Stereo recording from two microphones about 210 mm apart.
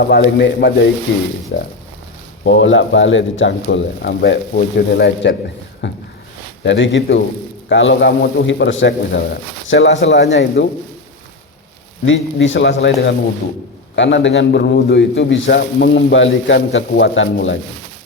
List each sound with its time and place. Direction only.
0.0 s speech: 50° left (ahead or behind)
2.4 s a man's voice: 65° left (ahead or behind)
12.0 s a man's voice: 65° left (ahead or behind)